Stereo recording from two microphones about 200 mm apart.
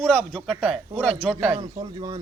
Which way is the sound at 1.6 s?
30° right (ahead or behind).